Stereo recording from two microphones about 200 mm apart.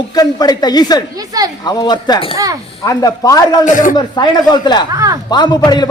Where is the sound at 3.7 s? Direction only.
40° left (ahead or behind).